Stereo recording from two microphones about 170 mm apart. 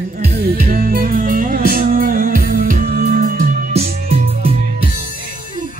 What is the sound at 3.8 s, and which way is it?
Music, 35° right (ahead or behind).